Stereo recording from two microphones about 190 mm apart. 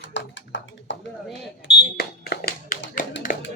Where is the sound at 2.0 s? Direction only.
55° left (ahead or behind).